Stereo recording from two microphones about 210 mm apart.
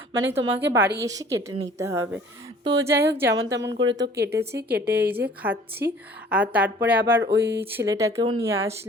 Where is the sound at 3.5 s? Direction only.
55° right (ahead or behind).